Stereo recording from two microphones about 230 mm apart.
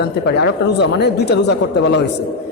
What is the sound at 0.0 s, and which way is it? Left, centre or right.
A woman's voice, left.